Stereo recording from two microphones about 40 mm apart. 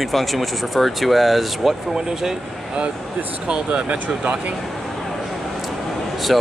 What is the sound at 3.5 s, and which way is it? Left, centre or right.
Speech, right.